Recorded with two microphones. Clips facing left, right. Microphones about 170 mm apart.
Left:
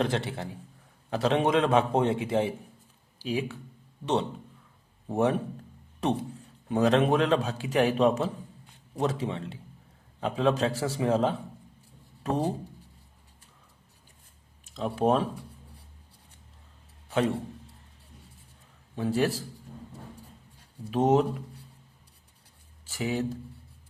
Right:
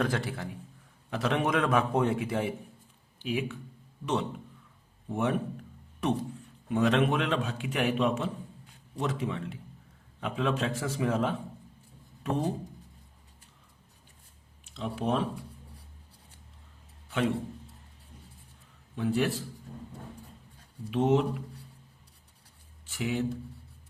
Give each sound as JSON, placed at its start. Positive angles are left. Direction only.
{"t": 0.0, "sound": "a man's voice", "side_deg": 25}
{"t": 14.6, "sound": "a sound", "side_deg": 40}
{"t": 14.9, "sound": "a man's voice", "side_deg": 40}
{"t": 18.9, "sound": "a man's voice", "side_deg": 35}
{"t": 20.9, "sound": "a man's voice", "side_deg": 40}
{"t": 22.9, "sound": "a man's voice", "side_deg": 40}